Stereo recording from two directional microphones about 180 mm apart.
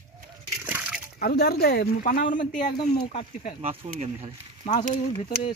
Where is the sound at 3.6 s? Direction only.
35° right (ahead or behind).